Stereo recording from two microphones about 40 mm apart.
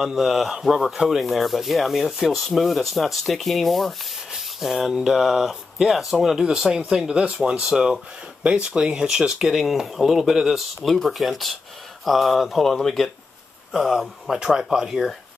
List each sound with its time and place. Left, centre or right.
0.0 s speech: centre
9.5 s speech: centre
14.4 s speech: centre